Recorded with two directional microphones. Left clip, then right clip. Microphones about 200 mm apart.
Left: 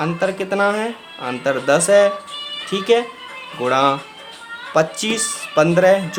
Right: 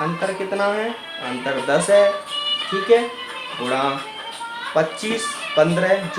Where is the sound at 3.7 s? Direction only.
40° left (ahead or behind).